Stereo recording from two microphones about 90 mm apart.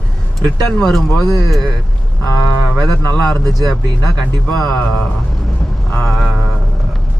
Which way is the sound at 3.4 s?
45° right (ahead or behind).